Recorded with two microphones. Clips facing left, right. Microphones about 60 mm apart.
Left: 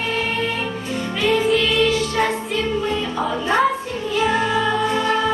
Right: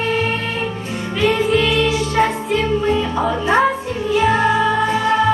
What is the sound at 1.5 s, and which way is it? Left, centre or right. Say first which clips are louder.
Music: right 2 dB; centre.